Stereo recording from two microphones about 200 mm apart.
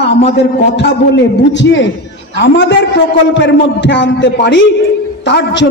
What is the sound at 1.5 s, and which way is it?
A man's voice, 60° left (ahead or behind).